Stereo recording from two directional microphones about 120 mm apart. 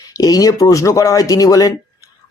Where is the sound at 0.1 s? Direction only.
30° left (ahead or behind).